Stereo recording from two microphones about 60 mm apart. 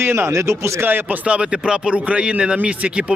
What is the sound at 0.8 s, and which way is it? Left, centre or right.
Speech, right.